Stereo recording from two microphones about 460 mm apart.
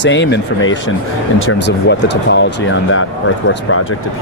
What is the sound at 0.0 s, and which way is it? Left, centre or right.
Speech, left.